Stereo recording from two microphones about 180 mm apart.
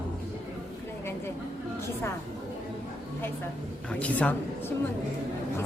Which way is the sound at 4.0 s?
10° left (ahead or behind).